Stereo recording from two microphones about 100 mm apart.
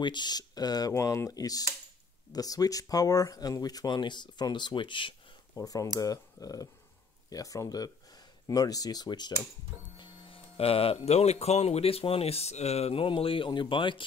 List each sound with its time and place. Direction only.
0.0 s speech: 50° left (ahead or behind)
5.6 s speech: 35° left (ahead or behind)
9.9 s printer: 55° left (ahead or behind)
10.6 s speech: 75° left (ahead or behind); by 14.0 s 55° left (ahead or behind)